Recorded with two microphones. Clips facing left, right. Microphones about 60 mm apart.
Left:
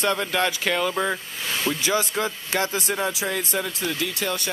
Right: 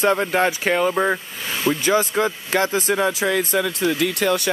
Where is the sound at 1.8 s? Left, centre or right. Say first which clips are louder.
Right 6 dB; right.